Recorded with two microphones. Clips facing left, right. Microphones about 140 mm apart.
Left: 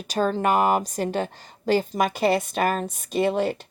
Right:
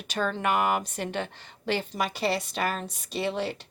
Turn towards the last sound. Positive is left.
turn(degrees=45)  # may be behind; listen again after turning